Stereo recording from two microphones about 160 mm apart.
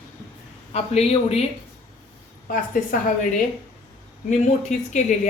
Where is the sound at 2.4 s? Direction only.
55° left (ahead or behind).